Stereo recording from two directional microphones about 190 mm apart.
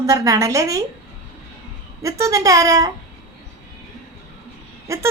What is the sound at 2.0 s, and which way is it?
Speech, 15° right (ahead or behind).